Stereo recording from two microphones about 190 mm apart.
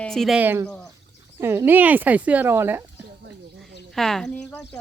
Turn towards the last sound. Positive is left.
turn(degrees=5)  # may be behind; listen again after turning